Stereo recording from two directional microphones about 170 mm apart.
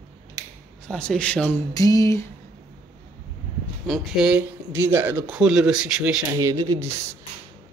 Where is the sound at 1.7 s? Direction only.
20° left (ahead or behind).